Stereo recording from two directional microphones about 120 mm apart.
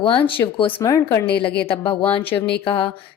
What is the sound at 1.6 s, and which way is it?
A woman's voice, 50° left (ahead or behind).